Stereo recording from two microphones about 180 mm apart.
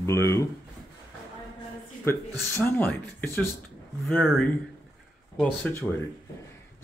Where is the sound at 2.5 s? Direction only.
10° left (ahead or behind).